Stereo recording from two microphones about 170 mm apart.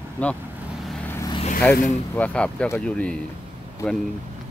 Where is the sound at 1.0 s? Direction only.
15° left (ahead or behind).